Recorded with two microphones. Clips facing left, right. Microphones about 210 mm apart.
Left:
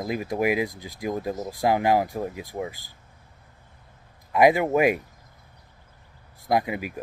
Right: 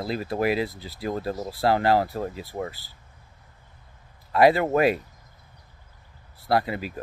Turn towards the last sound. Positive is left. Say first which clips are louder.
# even
turn(degrees=15)  # may be behind; listen again after turning